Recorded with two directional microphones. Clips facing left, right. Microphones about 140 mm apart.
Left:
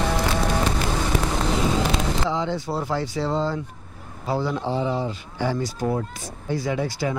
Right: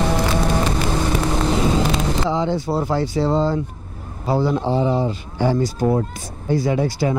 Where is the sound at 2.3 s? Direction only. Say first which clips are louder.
Right 5 dB; 35° right (ahead or behind).